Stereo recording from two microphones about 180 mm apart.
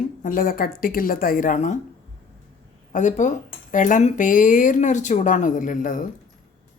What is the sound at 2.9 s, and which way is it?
Speech, 45° left (ahead or behind).